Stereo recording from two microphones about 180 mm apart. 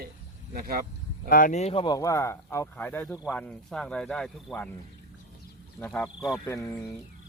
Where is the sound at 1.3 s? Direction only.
50° left (ahead or behind); by 4.7 s 5° left (ahead or behind).